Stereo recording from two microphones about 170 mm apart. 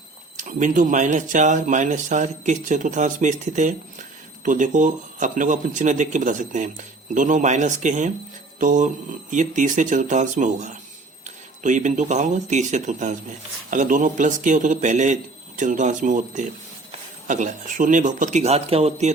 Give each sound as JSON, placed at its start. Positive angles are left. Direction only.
{"t": 0.3, "sound": "speech", "side_deg": -50}